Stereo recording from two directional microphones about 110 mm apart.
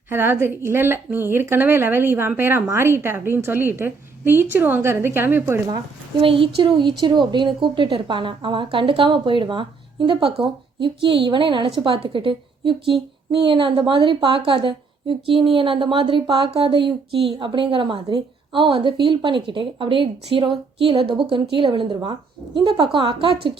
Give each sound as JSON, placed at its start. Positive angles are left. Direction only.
{"t": 0.1, "sound": "speech", "side_deg": -20}
{"t": 6.1, "sound": "a woman's voice", "side_deg": -55}